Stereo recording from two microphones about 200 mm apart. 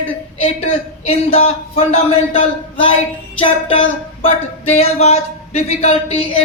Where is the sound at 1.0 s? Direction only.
30° left (ahead or behind).